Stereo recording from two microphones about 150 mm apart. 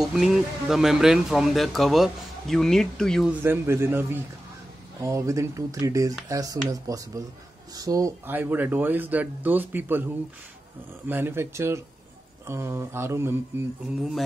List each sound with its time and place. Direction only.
0.0 s speech: centre (ahead or behind)
3.3 s speech: 15° right (ahead or behind)
11.1 s speech: 15° right (ahead or behind)